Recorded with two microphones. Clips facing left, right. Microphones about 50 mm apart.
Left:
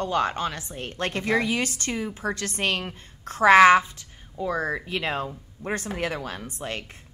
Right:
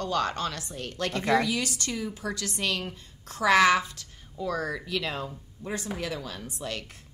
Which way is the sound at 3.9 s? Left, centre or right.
Left.